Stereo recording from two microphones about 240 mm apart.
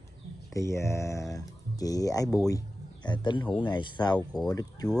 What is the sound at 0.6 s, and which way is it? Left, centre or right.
Speech, centre.